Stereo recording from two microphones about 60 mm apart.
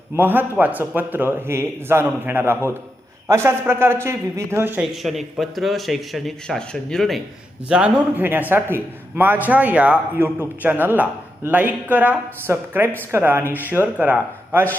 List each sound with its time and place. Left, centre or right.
0.2 s a man's voice: right
4.8 s speech: centre
7.7 s a man's voice: centre
8.1 s speech: right
10.2 s speech: right
13.8 s speech: right